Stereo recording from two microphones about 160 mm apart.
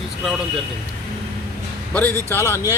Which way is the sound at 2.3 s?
15° left (ahead or behind).